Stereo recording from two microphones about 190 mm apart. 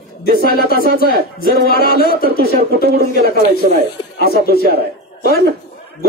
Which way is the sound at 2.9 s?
50° right (ahead or behind).